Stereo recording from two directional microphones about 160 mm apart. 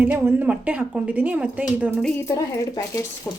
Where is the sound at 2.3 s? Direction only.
20° left (ahead or behind).